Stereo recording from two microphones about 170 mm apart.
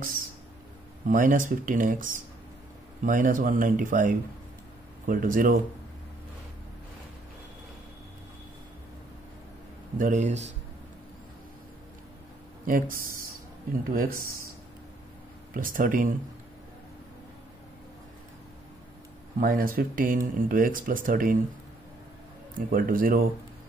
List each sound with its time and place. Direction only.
1.0 s speech: 50° right (ahead or behind)
9.9 s speech: 50° right (ahead or behind)
12.6 s speech: 55° right (ahead or behind)
13.9 s speech: 55° right (ahead or behind)
15.5 s speech: 55° right (ahead or behind)
19.4 s speech: 55° right (ahead or behind)
22.7 s speech: 55° right (ahead or behind)